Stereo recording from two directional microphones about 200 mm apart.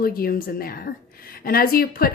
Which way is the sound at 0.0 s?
45° left (ahead or behind).